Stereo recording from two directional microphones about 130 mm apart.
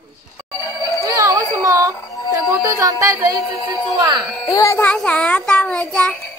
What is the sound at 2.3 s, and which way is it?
Music, 20° right (ahead or behind).